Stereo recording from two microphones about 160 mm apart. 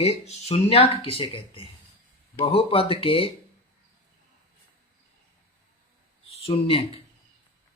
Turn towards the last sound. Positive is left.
turn(degrees=35)  # may be behind; listen again after turning